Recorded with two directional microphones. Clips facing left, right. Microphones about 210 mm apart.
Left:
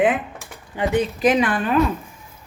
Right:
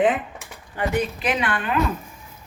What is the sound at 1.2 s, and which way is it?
Speech, 35° left (ahead or behind).